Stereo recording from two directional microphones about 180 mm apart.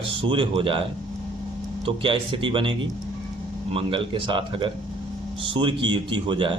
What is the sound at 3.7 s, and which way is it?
Speech, 30° right (ahead or behind).